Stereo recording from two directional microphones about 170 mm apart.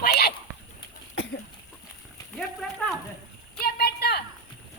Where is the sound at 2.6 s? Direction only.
Centre (ahead or behind).